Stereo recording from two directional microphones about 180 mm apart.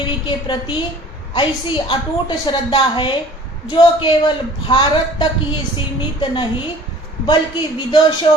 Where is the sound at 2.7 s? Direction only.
25° left (ahead or behind).